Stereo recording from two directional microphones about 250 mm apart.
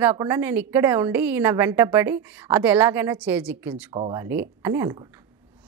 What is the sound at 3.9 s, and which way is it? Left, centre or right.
A woman's voice, right.